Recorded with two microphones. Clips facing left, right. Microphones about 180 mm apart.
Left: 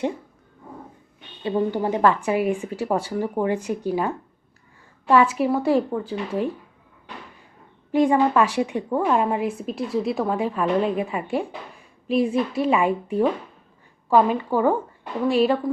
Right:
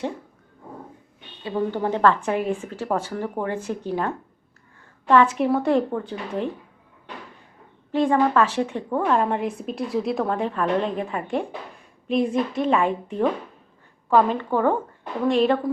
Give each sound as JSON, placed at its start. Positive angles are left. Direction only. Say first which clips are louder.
{"t": 1.5, "sound": "a woman's voice", "louder": "left 2 dB", "side_deg": 20}
{"t": 7.9, "sound": "a woman's voice", "louder": "left 1 dB", "side_deg": 15}